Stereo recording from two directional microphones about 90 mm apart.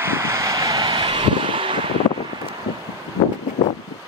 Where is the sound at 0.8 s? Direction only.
65° right (ahead or behind).